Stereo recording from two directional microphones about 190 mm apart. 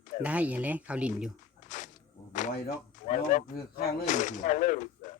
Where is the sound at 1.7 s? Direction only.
40° left (ahead or behind).